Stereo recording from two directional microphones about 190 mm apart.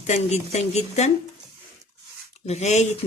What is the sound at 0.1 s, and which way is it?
Speech, 35° left (ahead or behind).